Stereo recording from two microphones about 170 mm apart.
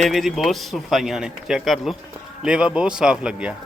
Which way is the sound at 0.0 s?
Centre (ahead or behind).